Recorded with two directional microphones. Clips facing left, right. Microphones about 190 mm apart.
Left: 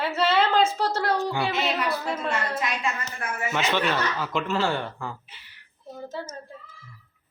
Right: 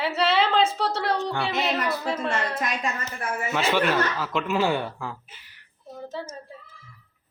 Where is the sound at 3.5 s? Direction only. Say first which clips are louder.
Right 2 dB; 10° right (ahead or behind).